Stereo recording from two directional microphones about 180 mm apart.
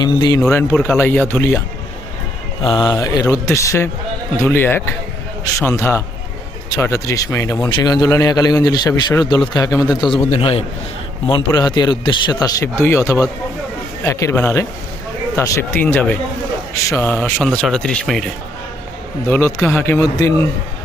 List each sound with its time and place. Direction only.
0.0 s a man's voice: 20° left (ahead or behind)
2.6 s a man's voice: 25° left (ahead or behind)
10.2 s a man's voice: 35° left (ahead or behind); by 18.3 s centre (ahead or behind)
19.3 s speech: 15° left (ahead or behind)